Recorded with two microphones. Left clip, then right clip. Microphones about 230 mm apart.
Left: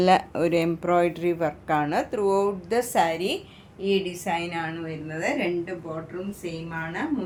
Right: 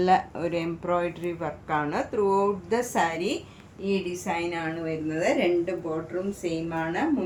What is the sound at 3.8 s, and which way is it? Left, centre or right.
Speech, left.